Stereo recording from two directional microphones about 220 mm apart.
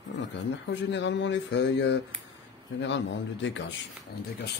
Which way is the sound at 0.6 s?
55° left (ahead or behind).